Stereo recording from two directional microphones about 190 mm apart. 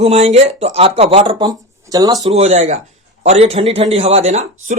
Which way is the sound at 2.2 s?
35° right (ahead or behind).